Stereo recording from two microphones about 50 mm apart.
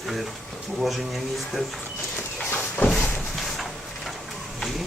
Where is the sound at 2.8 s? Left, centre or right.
Left.